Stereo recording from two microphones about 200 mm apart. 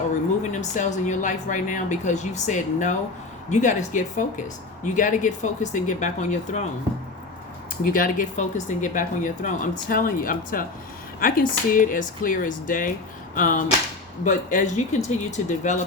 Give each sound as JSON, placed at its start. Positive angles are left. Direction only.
{"t": 0.6, "sound": "speech", "side_deg": 35}
{"t": 7.9, "sound": "speech", "side_deg": 45}